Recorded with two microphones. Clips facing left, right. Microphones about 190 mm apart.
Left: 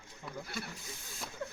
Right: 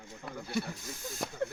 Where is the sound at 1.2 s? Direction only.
60° right (ahead or behind).